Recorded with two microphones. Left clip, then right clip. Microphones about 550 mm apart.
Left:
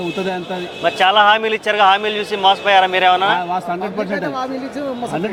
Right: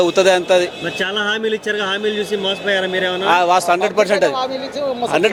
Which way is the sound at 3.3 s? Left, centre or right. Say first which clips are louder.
Right 7 dB; right.